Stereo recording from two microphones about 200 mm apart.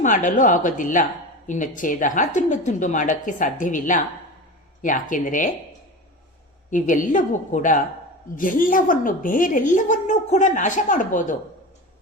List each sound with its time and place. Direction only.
0.0 s a woman's voice: 40° left (ahead or behind)
6.7 s a woman's voice: 40° left (ahead or behind)